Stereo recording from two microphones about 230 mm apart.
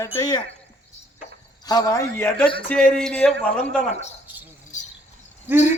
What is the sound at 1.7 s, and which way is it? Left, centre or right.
A man's voice, centre.